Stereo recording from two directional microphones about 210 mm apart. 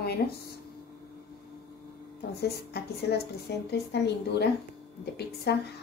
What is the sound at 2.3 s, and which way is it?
A woman's voice, 50° left (ahead or behind).